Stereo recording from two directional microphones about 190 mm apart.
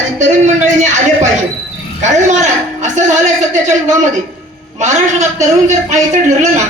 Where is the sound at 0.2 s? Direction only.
40° right (ahead or behind).